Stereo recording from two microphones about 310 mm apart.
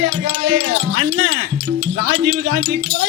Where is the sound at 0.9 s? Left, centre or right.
Right.